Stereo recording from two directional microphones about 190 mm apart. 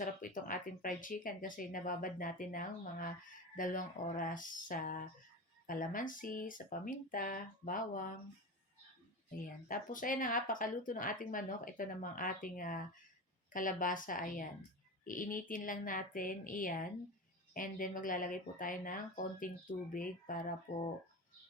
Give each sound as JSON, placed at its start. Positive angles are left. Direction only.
{"t": 0.0, "sound": "speech", "side_deg": 45}
{"t": 9.6, "sound": "speech", "side_deg": 45}